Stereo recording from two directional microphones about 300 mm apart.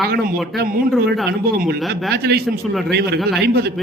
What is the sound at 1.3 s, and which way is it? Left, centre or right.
Speech, right.